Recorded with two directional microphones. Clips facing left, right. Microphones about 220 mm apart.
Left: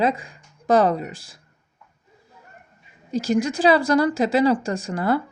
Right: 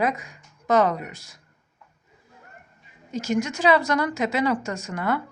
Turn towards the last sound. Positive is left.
turn(degrees=35)  # may be behind; listen again after turning